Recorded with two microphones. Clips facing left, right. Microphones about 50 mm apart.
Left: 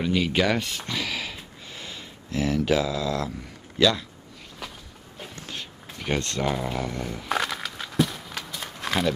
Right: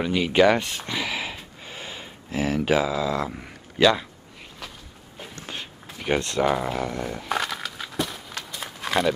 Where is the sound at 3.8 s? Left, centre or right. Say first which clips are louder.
Right 3 dB; right.